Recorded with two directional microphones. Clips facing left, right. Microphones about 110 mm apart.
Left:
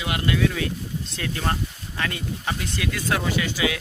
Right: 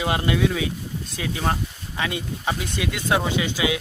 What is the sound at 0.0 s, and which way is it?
Speech, 30° right (ahead or behind).